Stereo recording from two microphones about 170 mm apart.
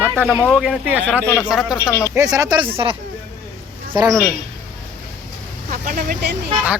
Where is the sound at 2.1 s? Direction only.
20° right (ahead or behind).